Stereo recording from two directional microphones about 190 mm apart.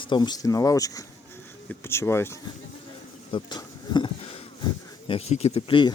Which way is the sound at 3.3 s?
20° left (ahead or behind).